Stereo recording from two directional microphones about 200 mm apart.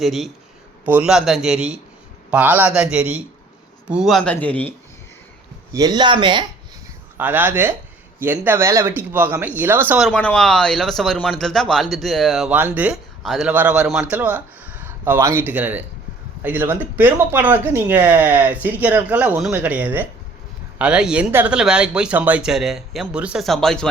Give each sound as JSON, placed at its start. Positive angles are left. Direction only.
{"t": 0.0, "sound": "speech", "side_deg": 0}
{"t": 5.7, "sound": "speech", "side_deg": -20}
{"t": 7.2, "sound": "speech", "side_deg": -10}
{"t": 10.1, "sound": "speech", "side_deg": 5}